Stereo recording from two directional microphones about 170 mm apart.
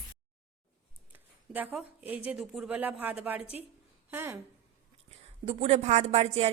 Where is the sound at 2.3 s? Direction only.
5° right (ahead or behind).